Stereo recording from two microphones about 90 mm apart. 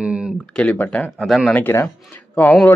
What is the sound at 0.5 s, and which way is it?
Speech, 15° left (ahead or behind).